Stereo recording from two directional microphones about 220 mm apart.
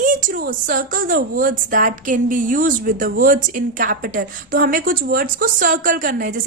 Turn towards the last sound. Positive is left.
turn(degrees=-40)  # may be behind; listen again after turning